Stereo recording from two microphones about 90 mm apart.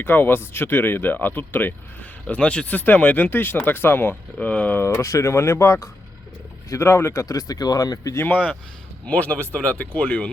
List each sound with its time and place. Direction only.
0.0 s speech: 20° left (ahead or behind)
4.8 s speech: 35° left (ahead or behind)
8.2 s speech: 15° left (ahead or behind)